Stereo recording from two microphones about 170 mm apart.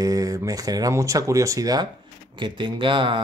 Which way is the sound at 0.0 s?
20° right (ahead or behind).